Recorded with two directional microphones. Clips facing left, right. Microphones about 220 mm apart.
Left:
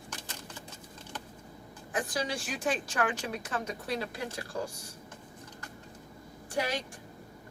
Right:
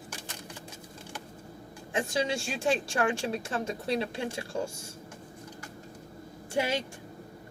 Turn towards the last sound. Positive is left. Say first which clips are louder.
# right 3 dB
turn(degrees=-25)  # may be behind; listen again after turning